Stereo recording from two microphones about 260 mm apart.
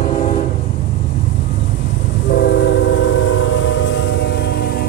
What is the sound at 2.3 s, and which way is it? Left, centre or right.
Train, left.